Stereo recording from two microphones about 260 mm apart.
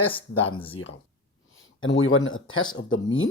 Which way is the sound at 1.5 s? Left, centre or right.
Left.